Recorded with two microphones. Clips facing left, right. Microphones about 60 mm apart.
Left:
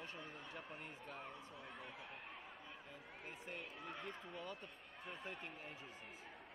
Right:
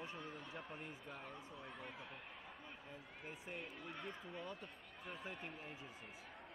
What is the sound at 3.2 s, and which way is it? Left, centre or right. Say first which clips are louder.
Speech: right 1 dB; centre.